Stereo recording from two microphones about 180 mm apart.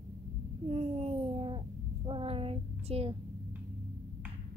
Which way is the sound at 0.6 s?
35° right (ahead or behind).